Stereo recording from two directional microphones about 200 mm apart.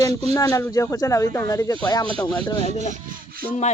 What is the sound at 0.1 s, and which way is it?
Speech, 30° right (ahead or behind).